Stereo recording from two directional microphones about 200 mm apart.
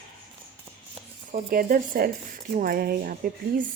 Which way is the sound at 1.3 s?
45° right (ahead or behind).